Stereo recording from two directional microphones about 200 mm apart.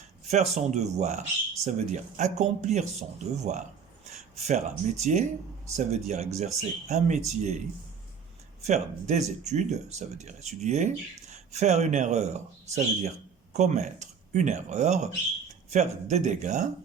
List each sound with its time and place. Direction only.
0.3 s speech: 35° right (ahead or behind)
8.6 s speech: 35° right (ahead or behind)